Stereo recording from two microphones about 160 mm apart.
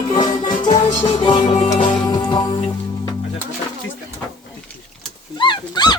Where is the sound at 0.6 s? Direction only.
25° left (ahead or behind).